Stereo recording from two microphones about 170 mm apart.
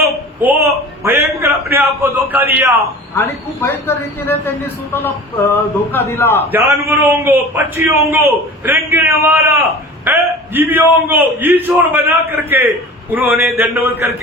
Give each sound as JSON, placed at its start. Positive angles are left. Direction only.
{"t": 0.4, "sound": "a sound", "side_deg": -10}
{"t": 2.0, "sound": "a man's voice", "side_deg": -15}
{"t": 3.2, "sound": "speech", "side_deg": 15}
{"t": 6.5, "sound": "a man's voice", "side_deg": -10}